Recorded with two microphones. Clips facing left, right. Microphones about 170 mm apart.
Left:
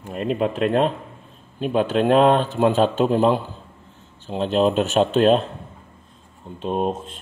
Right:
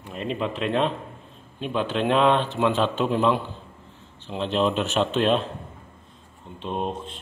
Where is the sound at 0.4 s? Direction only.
45° left (ahead or behind).